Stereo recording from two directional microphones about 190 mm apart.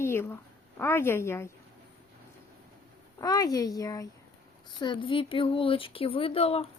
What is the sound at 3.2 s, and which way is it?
Speech, 20° left (ahead or behind).